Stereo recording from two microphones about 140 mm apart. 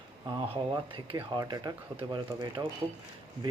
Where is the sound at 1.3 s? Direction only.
25° right (ahead or behind).